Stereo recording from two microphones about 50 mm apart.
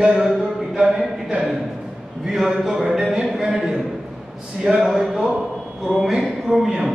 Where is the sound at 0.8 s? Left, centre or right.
Centre.